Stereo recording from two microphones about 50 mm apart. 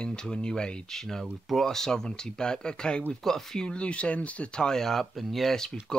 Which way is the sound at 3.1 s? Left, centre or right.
Centre.